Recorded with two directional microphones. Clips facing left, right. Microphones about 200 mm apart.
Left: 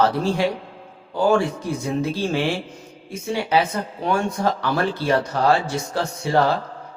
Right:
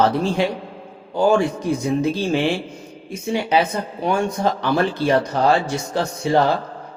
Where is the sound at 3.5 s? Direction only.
20° right (ahead or behind).